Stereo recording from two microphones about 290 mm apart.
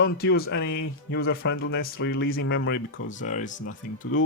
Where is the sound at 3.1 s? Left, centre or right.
Left.